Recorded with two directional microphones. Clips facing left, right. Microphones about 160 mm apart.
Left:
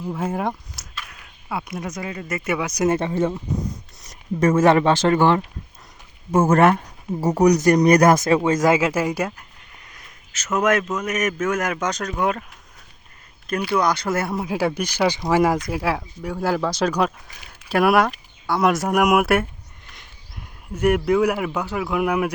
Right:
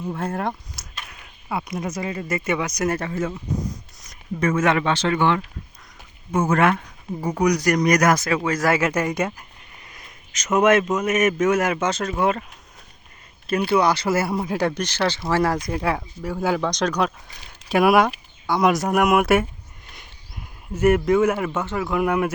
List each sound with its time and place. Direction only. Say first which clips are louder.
0.1 s speech: left 2 dB; 5° left (ahead or behind)
2.8 s speech: left 8 dB; 25° left (ahead or behind)
4.1 s speech: left 4 dB; 40° left (ahead or behind)
6.4 s speech: left 3 dB; 40° left (ahead or behind)
7.5 s speech: left 4 dB; 25° left (ahead or behind); by 9.3 s 5° left (ahead or behind)
10.4 s a man's voice: right 3 dB; 10° right (ahead or behind)
13.5 s speech: right 2 dB; 5° right (ahead or behind); by 15.6 s 15° left (ahead or behind)
15.7 s speech: even; 5° left (ahead or behind)
20.7 s speech: right 1 dB; 5° right (ahead or behind)